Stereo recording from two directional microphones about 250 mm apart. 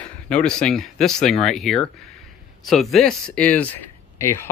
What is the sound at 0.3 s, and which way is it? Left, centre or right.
Speech, centre.